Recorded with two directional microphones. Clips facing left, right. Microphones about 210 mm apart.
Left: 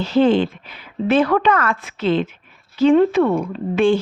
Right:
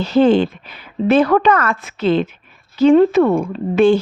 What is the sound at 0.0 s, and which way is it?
A woman's voice, 45° right (ahead or behind).